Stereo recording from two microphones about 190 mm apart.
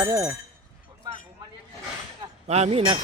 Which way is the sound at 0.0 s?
15° right (ahead or behind).